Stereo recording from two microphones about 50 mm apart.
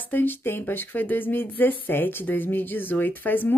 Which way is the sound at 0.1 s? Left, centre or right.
Left.